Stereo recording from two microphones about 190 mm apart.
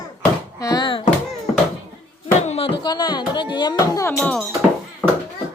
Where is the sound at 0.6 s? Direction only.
20° left (ahead or behind).